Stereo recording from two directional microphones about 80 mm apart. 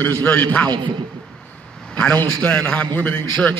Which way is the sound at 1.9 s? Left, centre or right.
Centre.